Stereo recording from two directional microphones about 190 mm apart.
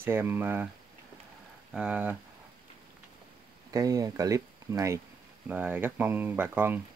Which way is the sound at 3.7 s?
20° right (ahead or behind).